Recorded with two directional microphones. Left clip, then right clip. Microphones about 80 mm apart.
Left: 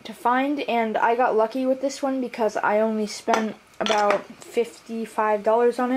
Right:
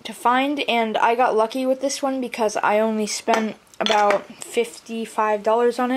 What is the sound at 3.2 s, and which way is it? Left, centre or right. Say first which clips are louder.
Speech: right 2 dB; centre.